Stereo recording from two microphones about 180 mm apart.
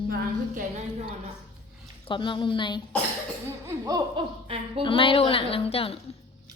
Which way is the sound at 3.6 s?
20° right (ahead or behind).